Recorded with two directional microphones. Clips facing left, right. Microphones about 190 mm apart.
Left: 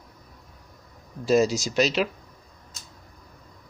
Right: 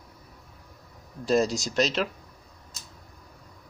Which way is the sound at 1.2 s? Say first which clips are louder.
Left 3 dB; centre (ahead or behind).